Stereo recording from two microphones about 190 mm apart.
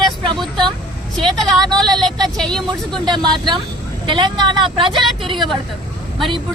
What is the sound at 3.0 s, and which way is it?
Speech, 25° right (ahead or behind).